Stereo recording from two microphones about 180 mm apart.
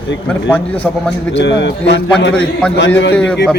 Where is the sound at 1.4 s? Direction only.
75° left (ahead or behind).